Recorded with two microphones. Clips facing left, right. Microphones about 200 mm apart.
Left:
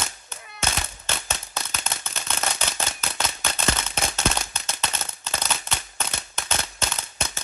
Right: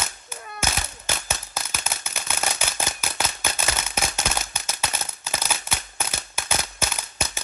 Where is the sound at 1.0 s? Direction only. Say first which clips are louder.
Right 1 dB; 10° right (ahead or behind).